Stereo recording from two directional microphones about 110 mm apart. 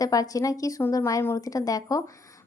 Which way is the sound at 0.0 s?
35° left (ahead or behind).